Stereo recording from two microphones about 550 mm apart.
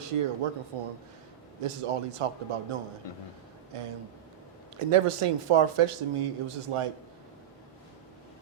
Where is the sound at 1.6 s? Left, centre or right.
Right.